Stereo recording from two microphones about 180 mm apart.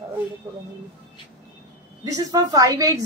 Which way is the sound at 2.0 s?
20° right (ahead or behind).